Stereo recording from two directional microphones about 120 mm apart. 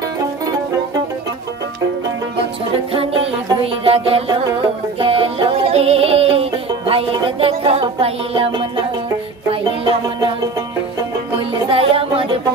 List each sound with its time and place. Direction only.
2.9 s music: 50° right (ahead or behind)
11.5 s music: 50° right (ahead or behind)